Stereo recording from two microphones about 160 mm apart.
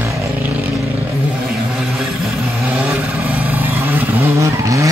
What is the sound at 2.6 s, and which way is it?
Vehicle, 10° right (ahead or behind).